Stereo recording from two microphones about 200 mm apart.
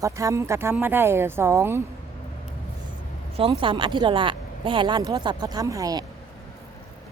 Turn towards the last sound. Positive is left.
turn(degrees=-15)  # may be behind; listen again after turning